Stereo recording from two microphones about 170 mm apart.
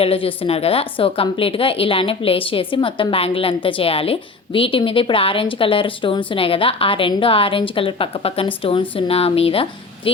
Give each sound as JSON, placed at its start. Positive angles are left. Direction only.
{"t": 0.0, "sound": "a woman's voice", "side_deg": 35}